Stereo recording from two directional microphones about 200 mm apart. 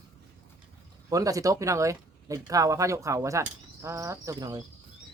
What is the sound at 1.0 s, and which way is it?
Speech, 15° right (ahead or behind).